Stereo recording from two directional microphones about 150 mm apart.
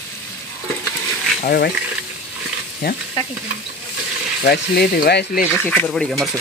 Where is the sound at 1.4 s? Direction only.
75° left (ahead or behind).